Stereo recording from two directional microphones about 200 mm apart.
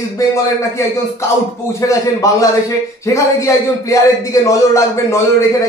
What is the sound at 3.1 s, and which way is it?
A man's voice, 15° left (ahead or behind).